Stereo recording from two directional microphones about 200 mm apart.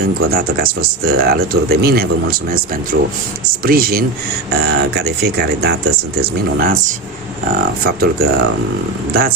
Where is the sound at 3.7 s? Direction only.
50° right (ahead or behind).